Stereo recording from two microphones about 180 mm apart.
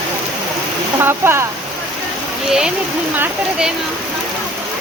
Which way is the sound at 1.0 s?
15° right (ahead or behind).